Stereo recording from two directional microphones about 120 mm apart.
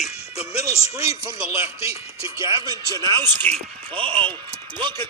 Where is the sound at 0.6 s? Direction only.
25° right (ahead or behind).